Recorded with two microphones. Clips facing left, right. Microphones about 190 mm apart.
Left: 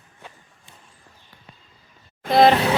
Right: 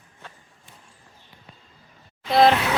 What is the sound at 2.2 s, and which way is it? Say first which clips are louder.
Speech: left 2 dB; 50° left (ahead or behind).